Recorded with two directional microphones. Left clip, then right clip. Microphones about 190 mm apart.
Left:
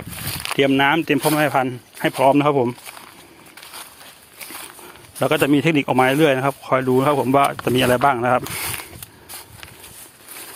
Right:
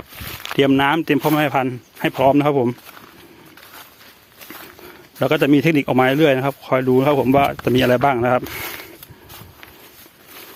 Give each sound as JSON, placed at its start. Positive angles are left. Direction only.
{"t": 0.5, "sound": "speech", "side_deg": -35}
{"t": 5.2, "sound": "speech", "side_deg": -30}